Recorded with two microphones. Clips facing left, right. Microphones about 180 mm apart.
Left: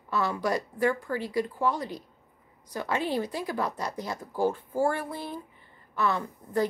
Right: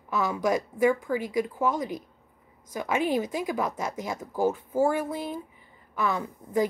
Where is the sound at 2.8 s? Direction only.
15° right (ahead or behind).